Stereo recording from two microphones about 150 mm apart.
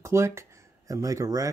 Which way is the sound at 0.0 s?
20° right (ahead or behind).